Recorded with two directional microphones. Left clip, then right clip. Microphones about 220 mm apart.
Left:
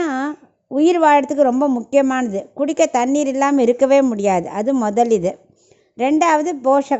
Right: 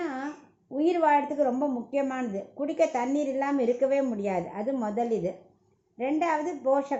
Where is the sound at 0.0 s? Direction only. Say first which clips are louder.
Left 12 dB; 50° left (ahead or behind).